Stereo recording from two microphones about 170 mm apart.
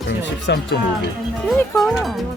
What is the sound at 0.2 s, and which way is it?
Speech, 85° left.